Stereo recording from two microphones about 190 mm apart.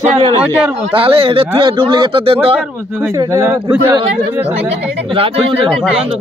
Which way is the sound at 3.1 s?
15° right (ahead or behind).